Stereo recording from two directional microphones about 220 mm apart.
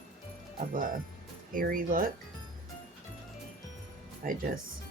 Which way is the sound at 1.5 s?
40° right (ahead or behind).